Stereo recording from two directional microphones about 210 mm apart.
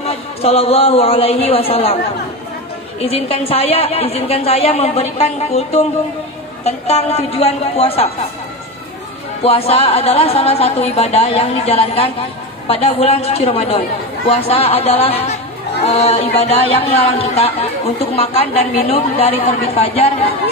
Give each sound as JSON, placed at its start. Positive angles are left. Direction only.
{"t": 0.0, "sound": "a woman's voice", "side_deg": 30}
{"t": 3.1, "sound": "a woman's voice", "side_deg": 30}
{"t": 9.4, "sound": "a woman's voice", "side_deg": 30}